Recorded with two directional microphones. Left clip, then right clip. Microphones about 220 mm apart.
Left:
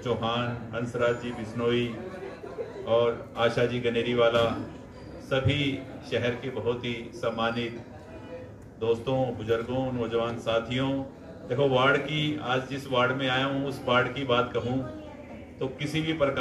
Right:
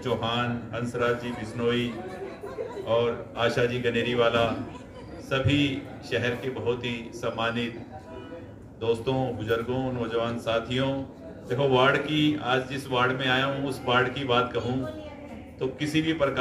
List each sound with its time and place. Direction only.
0.0 s a man's voice: 30° right (ahead or behind)
2.9 s a man's voice: 30° right (ahead or behind)
8.8 s a man's voice: 30° right (ahead or behind)
15.6 s a man's voice: 30° right (ahead or behind)